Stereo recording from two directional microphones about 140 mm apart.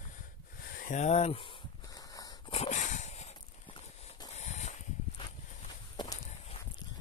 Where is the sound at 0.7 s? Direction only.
75° left (ahead or behind); by 1.5 s 45° left (ahead or behind).